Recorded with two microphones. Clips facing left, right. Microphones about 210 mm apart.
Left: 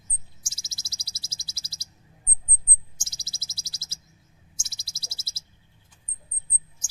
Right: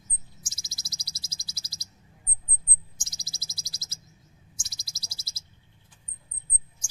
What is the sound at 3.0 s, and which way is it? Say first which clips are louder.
Bird: right 1 dB; 30° left (ahead or behind).